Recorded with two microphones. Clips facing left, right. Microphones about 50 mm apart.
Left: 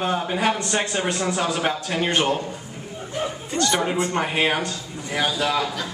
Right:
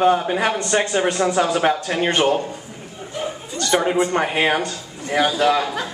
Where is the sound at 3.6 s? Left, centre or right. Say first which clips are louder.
Right 5 dB; centre.